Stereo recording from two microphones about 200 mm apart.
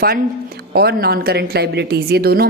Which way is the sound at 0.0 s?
50° right (ahead or behind).